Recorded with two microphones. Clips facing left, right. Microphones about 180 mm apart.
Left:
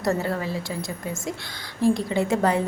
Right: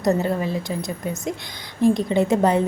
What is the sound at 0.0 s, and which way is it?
A woman's voice, 20° right (ahead or behind).